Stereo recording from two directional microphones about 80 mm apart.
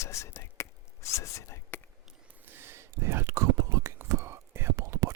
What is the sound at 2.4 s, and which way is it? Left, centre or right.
Whispering, right.